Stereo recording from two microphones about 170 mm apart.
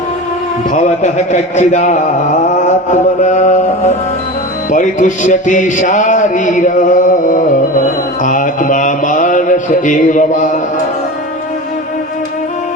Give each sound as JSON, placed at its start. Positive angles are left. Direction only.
{"t": 0.7, "sound": "a man's voice", "side_deg": 45}
{"t": 4.7, "sound": "music", "side_deg": 50}
{"t": 8.2, "sound": "mantra", "side_deg": 50}